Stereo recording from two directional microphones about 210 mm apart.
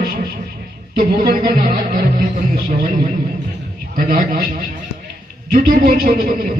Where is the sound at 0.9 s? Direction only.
40° right (ahead or behind).